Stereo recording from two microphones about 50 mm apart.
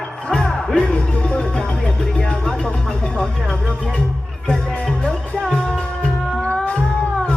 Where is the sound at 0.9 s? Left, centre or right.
Left.